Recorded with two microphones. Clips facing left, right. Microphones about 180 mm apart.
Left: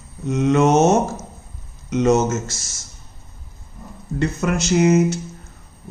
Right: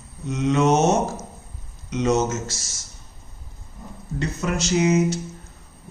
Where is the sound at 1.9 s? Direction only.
50° left (ahead or behind).